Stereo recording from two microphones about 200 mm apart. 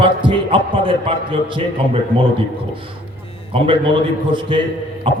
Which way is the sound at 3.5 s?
25° right (ahead or behind).